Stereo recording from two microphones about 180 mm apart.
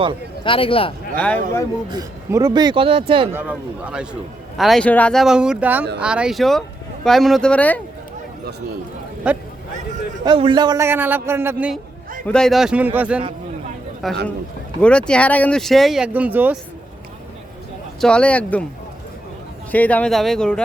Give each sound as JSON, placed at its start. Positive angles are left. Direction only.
{"t": 0.4, "sound": "speech", "side_deg": 30}
{"t": 1.1, "sound": "speech", "side_deg": 10}
{"t": 1.9, "sound": "speech", "side_deg": -20}
{"t": 3.3, "sound": "a man's voice", "side_deg": -10}
{"t": 9.2, "sound": "a man's voice", "side_deg": -5}
{"t": 10.2, "sound": "a man's voice", "side_deg": -25}
{"t": 12.2, "sound": "a man's voice", "side_deg": 5}
{"t": 18.0, "sound": "speech", "side_deg": 5}
{"t": 19.7, "sound": "a man's voice", "side_deg": 10}